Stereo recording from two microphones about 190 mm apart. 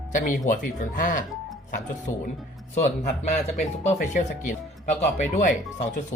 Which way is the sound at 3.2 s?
35° left (ahead or behind).